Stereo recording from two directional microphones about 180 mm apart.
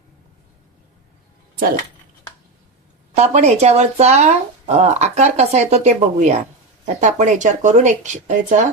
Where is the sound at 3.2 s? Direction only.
40° right (ahead or behind).